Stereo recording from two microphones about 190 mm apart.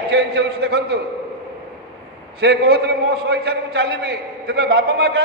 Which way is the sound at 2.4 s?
60° right (ahead or behind).